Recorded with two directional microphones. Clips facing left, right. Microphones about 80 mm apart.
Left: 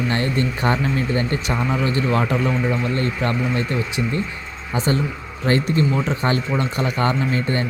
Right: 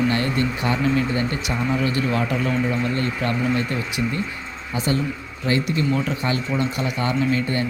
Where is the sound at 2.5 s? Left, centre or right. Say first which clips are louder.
Left 1 dB; left.